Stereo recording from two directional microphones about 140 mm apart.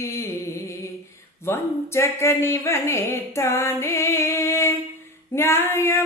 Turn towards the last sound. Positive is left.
turn(degrees=20)  # may be behind; listen again after turning